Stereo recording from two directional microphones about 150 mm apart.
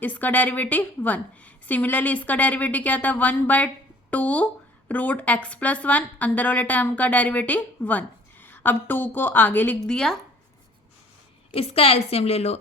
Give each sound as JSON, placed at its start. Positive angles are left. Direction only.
{"t": 0.0, "sound": "a woman's voice", "side_deg": 10}
{"t": 11.5, "sound": "a woman's voice", "side_deg": 40}